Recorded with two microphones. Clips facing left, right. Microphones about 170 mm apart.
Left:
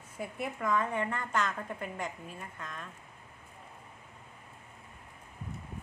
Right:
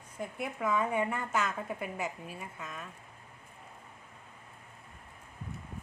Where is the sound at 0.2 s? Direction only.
Centre (ahead or behind).